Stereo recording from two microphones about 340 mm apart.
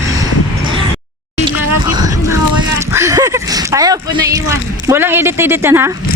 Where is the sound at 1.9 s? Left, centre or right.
Centre.